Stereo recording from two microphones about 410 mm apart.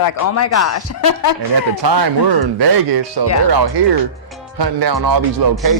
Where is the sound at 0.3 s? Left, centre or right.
Left.